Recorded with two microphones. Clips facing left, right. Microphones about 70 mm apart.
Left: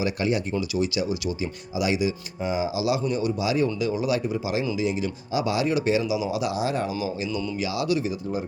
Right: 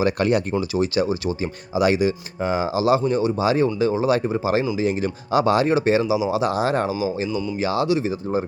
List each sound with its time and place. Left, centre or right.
0.0 s speech: right
0.5 s speech: right
6.1 s speech: right
6.4 s speech: right
7.3 s speech: centre
7.6 s speech: right
7.9 s speech: right